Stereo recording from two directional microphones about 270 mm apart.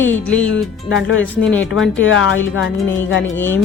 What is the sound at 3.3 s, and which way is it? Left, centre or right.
Speech, centre.